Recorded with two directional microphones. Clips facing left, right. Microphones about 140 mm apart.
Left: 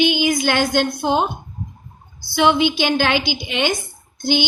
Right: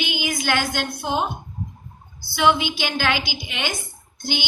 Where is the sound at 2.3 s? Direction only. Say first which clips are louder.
Left 4 dB; 25° left (ahead or behind).